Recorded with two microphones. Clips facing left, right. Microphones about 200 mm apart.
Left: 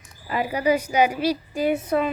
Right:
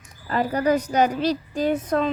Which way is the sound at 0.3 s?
10° left (ahead or behind).